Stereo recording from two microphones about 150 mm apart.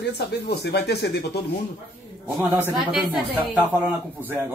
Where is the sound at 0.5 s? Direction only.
90° left.